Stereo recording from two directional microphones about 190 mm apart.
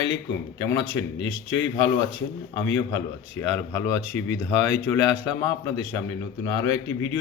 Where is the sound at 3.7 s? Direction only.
15° left (ahead or behind).